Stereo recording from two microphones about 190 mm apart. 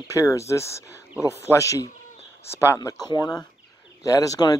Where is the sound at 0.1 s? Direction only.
15° left (ahead or behind).